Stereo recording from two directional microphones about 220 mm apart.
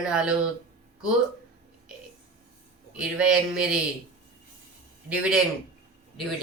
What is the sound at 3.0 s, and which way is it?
Speech, 5° right (ahead or behind).